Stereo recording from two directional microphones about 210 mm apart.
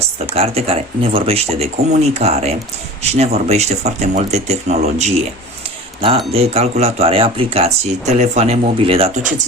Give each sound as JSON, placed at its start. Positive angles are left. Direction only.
{"t": 0.3, "sound": "speech", "side_deg": -30}
{"t": 6.3, "sound": "speech", "side_deg": -30}